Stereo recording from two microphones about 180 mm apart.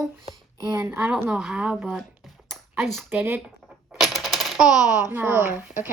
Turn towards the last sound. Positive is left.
turn(degrees=-10)  # may be behind; listen again after turning